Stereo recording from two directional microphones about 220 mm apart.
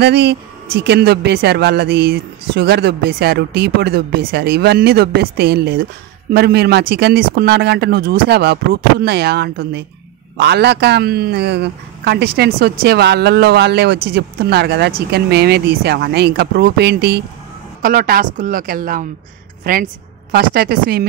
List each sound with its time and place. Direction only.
0.0 s a woman's voice: 45° right (ahead or behind)